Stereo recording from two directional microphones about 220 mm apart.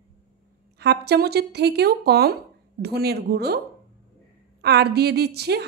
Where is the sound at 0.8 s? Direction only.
50° right (ahead or behind).